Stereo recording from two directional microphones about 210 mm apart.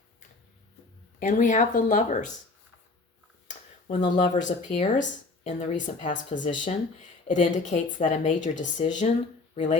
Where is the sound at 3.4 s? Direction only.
35° left (ahead or behind).